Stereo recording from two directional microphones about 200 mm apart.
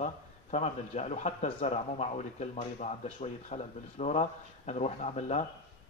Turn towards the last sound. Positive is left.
turn(degrees=35)  # may be behind; listen again after turning